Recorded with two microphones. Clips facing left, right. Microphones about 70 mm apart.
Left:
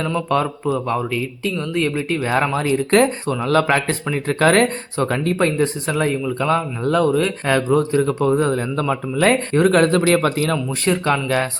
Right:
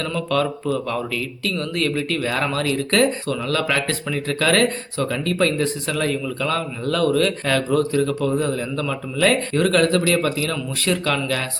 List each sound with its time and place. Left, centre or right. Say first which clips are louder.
0.0 s speech: left 2 dB; centre
5.0 s speech: left 4 dB; left
5.3 s speech: right 1 dB; left
10.8 s speech: left 1 dB; left